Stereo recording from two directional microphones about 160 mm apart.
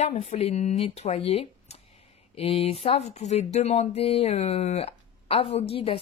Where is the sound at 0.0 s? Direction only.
45° left (ahead or behind).